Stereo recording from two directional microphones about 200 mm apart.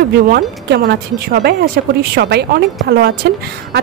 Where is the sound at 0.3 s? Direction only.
50° right (ahead or behind).